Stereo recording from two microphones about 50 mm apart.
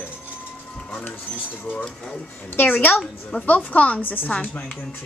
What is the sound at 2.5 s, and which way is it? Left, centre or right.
A woman's voice, left.